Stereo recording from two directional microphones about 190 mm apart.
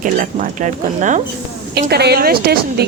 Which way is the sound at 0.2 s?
40° right (ahead or behind).